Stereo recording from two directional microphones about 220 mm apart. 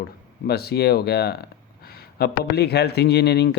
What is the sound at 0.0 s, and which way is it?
Speech, 45° left (ahead or behind).